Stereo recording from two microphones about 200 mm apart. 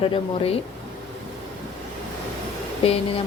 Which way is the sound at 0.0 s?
30° left (ahead or behind).